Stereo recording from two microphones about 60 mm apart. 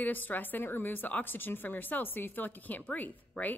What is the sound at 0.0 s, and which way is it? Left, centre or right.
A woman's voice, left.